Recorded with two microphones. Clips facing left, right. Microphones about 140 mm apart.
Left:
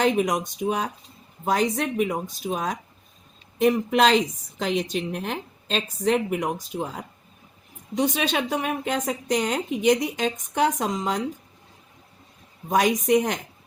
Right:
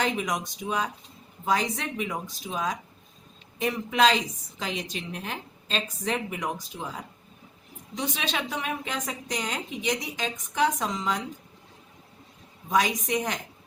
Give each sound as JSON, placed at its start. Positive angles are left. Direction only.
{"t": 0.0, "sound": "a woman's voice", "side_deg": 45}
{"t": 12.6, "sound": "a woman's voice", "side_deg": 50}